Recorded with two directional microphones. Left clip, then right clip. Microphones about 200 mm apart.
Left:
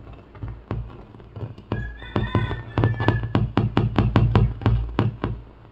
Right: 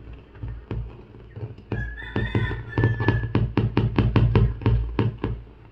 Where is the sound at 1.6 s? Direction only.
45° left (ahead or behind).